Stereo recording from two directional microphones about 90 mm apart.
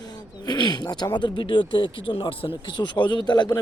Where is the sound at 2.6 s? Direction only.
60° left (ahead or behind).